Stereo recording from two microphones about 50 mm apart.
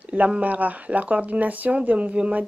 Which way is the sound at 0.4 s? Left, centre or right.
Right.